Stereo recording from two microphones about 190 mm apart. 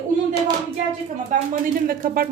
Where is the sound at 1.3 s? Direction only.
40° right (ahead or behind).